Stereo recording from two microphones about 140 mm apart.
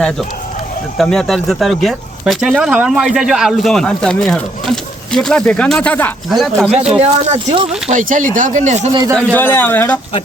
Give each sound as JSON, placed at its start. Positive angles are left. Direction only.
{"t": 0.9, "sound": "speech", "side_deg": 5}
{"t": 6.3, "sound": "speech", "side_deg": 0}
{"t": 7.1, "sound": "speech", "side_deg": -40}
{"t": 7.9, "sound": "speech", "side_deg": -70}
{"t": 9.1, "sound": "speech", "side_deg": 10}